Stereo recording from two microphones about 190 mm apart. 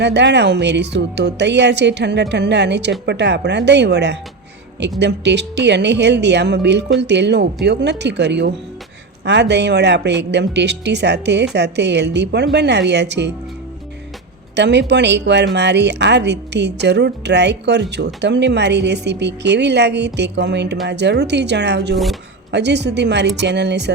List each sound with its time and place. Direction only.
0.0 s speech: 65° right (ahead or behind)
14.5 s speech: 65° right (ahead or behind)
21.9 s speech: centre (ahead or behind)
22.5 s speech: 65° right (ahead or behind)